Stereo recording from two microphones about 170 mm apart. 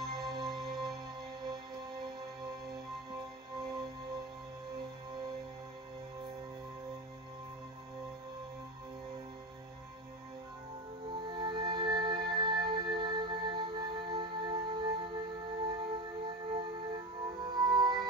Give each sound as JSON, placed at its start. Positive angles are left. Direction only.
{"t": 0.2, "sound": "music", "side_deg": -25}
{"t": 11.1, "sound": "music", "side_deg": -25}